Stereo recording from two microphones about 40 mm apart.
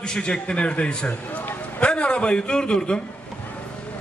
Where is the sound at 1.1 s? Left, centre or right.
Left.